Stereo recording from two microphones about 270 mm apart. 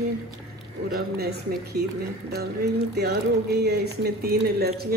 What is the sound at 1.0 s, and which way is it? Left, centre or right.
Speech, right.